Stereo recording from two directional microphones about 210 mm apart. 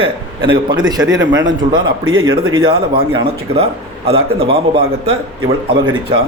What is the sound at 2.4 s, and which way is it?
Speech, 75° right (ahead or behind).